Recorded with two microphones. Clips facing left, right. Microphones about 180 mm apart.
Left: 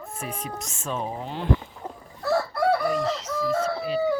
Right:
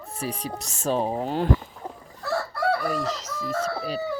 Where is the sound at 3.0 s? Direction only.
40° right (ahead or behind).